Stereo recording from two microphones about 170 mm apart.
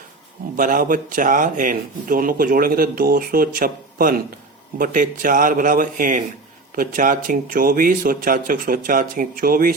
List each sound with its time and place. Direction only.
0.5 s a man's voice: 50° right (ahead or behind)